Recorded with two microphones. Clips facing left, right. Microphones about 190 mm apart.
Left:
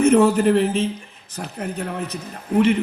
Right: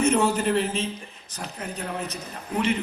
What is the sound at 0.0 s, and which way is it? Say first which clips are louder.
A man's voice: left 7 dB; 60° left (ahead or behind).